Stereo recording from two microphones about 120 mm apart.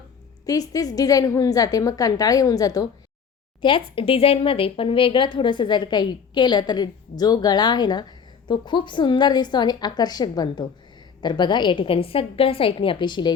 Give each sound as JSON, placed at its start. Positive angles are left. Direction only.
{"t": 0.4, "sound": "speech", "side_deg": 30}
{"t": 3.6, "sound": "a woman's voice", "side_deg": 45}